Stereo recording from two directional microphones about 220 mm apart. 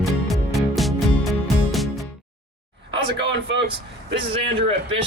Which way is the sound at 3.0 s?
50° right (ahead or behind).